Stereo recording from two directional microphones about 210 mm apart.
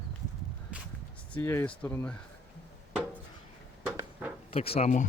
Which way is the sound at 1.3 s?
10° left (ahead or behind).